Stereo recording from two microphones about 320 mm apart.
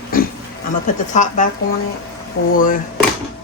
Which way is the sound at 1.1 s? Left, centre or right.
Left.